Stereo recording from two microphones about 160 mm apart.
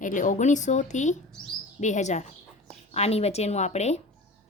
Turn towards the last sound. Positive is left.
turn(degrees=45)  # may be behind; listen again after turning